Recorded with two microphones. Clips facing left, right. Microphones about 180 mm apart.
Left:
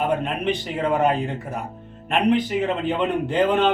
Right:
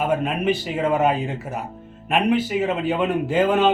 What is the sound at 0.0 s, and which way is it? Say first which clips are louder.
A man's voice: right 1 dB; 5° right (ahead or behind).